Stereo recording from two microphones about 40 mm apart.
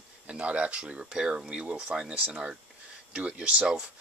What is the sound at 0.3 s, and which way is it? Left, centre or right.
Speech, right.